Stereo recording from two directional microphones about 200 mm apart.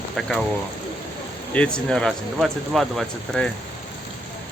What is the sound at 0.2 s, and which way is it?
Speech, centre (ahead or behind).